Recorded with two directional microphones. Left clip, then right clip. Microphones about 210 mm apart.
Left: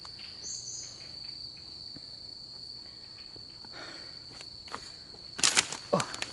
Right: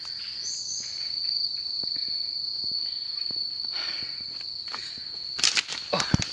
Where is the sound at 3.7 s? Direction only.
20° left (ahead or behind).